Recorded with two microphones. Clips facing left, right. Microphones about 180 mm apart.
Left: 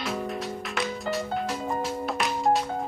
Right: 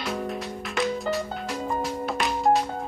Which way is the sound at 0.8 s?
Centre (ahead or behind).